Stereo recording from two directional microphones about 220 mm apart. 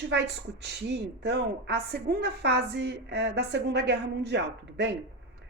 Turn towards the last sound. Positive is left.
turn(degrees=-50)  # may be behind; listen again after turning